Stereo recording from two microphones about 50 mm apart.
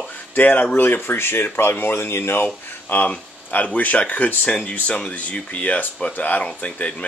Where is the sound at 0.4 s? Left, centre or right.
Left.